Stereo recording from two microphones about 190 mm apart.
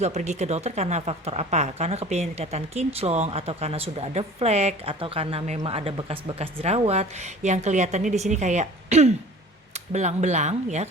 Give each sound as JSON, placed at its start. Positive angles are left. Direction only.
{"t": 0.0, "sound": "speech", "side_deg": -35}